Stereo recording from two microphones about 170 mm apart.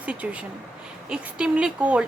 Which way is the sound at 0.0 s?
10° right (ahead or behind).